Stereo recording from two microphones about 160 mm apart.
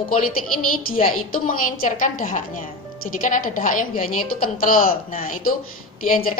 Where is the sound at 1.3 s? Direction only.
60° left (ahead or behind).